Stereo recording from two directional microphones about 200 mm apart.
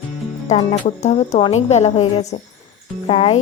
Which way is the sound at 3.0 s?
30° left (ahead or behind).